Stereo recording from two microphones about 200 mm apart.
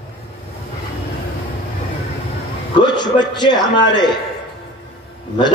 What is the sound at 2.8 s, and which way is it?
Speech, 20° left (ahead or behind).